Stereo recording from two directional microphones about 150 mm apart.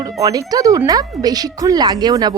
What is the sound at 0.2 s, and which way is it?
Speech, 25° right (ahead or behind).